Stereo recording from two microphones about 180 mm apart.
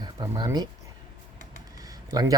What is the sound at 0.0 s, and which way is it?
Speech, 20° right (ahead or behind).